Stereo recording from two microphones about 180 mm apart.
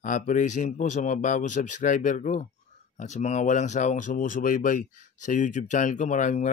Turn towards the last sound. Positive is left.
turn(degrees=45)  # may be behind; listen again after turning